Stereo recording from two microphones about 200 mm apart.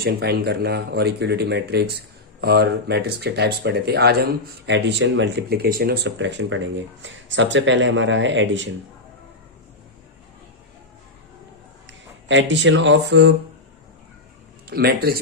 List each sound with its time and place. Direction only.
0.0 s speech: 55° right (ahead or behind)
11.9 s speech: 65° right (ahead or behind)
14.7 s speech: 50° right (ahead or behind)